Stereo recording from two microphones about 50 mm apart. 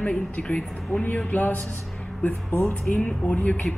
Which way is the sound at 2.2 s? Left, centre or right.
Left.